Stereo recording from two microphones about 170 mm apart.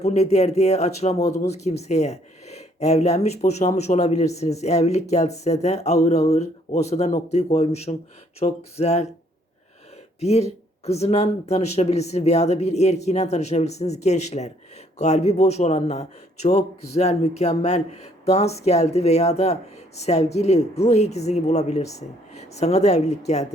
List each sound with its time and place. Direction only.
0.0 s speech: 40° left (ahead or behind)
10.2 s speech: 40° left (ahead or behind)